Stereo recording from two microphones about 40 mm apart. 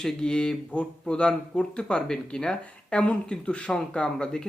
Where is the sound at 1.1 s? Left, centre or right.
Left.